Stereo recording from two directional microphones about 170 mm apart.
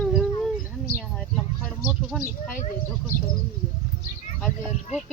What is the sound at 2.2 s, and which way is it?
Speech, 55° left (ahead or behind).